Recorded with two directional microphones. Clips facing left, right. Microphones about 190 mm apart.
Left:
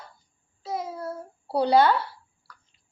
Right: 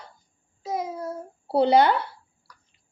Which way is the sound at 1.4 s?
25° right (ahead or behind).